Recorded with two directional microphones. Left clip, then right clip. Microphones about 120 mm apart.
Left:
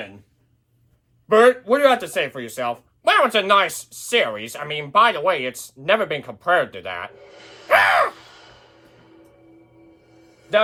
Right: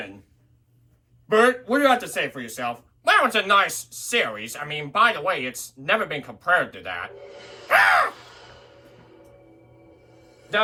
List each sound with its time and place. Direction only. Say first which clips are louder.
1.3 s speech: left 4 dB; 65° left (ahead or behind)
7.2 s speech: right 2 dB; 15° right (ahead or behind)
7.7 s gasp: left 2 dB; 90° left